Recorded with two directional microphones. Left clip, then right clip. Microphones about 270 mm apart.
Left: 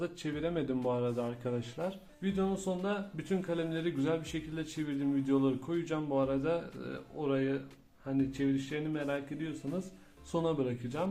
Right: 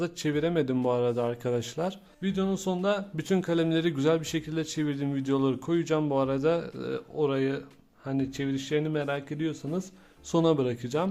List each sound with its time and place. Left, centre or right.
0.0 s speech: right